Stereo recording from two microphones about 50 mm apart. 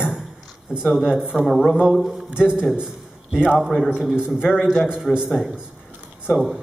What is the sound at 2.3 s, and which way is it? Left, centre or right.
Speech, centre.